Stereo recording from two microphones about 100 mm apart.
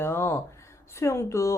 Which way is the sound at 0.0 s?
25° left (ahead or behind).